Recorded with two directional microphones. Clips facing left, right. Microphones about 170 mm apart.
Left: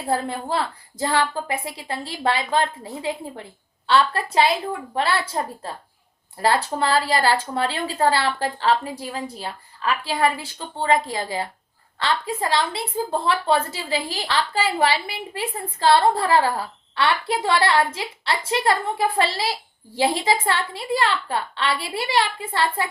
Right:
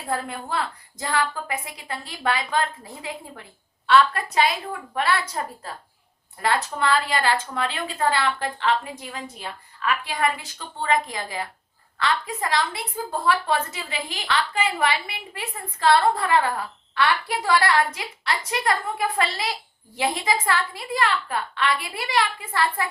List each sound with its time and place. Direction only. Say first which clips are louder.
0.1 s a woman's voice: left 4 dB; 30° left (ahead or behind)